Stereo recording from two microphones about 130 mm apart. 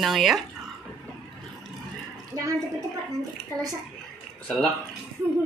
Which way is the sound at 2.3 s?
25° right (ahead or behind).